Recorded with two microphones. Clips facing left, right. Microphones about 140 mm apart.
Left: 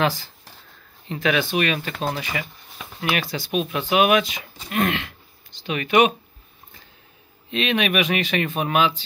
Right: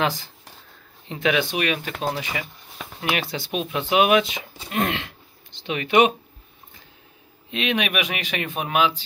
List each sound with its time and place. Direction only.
0.0 s speech: 20° right (ahead or behind)
7.5 s speech: 10° right (ahead or behind)